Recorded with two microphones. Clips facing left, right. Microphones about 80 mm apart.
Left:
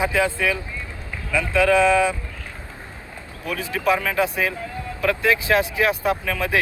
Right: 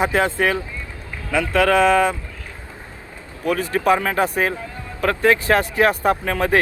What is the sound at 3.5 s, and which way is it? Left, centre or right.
Speech, right.